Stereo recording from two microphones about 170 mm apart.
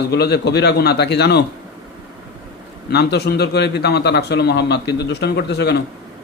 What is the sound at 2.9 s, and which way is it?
A man's voice, 75° left (ahead or behind).